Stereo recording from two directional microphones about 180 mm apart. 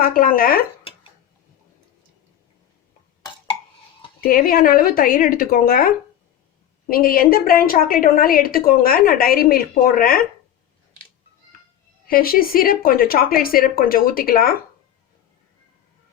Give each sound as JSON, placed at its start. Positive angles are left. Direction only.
{"t": 0.0, "sound": "a woman's voice", "side_deg": 50}
{"t": 4.2, "sound": "a woman's voice", "side_deg": 55}
{"t": 12.0, "sound": "a woman's voice", "side_deg": 55}